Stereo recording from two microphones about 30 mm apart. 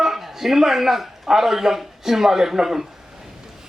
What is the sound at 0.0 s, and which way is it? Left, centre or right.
Speech, centre.